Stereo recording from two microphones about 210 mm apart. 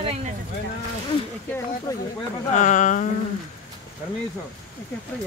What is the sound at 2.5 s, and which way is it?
Speech, 35° left (ahead or behind).